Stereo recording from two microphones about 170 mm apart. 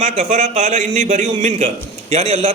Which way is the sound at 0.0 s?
45° right (ahead or behind).